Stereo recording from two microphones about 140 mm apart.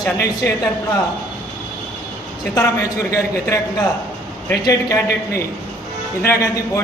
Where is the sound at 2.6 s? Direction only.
20° left (ahead or behind).